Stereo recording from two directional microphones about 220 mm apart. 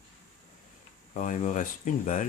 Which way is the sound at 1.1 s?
35° left (ahead or behind).